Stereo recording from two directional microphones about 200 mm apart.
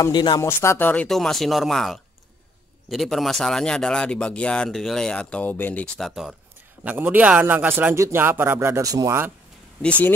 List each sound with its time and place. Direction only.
0.0 s a man's voice: 20° left (ahead or behind); by 9.3 s 15° right (ahead or behind)
9.8 s speech: 5° left (ahead or behind)